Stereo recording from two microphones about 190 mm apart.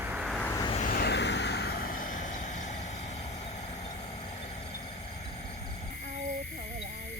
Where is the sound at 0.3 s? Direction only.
10° left (ahead or behind).